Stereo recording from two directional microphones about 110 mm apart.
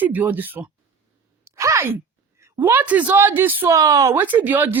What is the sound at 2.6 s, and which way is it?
A woman's voice, 20° right (ahead or behind).